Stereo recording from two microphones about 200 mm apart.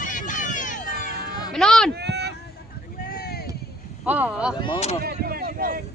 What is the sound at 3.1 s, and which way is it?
Vehicle, 50° left (ahead or behind).